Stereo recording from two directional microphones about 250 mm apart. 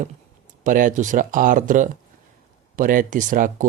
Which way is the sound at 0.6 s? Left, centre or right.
Right.